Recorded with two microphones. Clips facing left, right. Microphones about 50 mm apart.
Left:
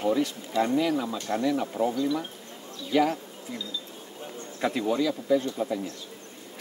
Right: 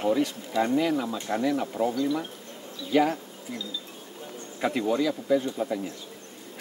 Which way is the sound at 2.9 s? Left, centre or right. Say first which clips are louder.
Right 1 dB; centre.